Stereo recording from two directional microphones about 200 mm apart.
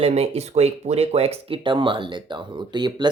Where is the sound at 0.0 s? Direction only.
30° right (ahead or behind).